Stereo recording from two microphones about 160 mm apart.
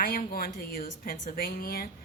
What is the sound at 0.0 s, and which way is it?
A woman's voice, 65° left (ahead or behind).